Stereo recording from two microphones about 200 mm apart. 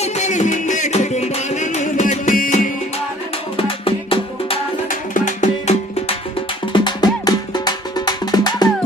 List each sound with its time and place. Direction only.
0.0 s music: 35° left (ahead or behind)
3.8 s music: 25° left (ahead or behind)
4.9 s music: 40° left (ahead or behind)
6.7 s music: 20° left (ahead or behind)